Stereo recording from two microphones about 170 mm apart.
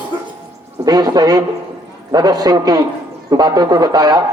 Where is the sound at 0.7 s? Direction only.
25° right (ahead or behind).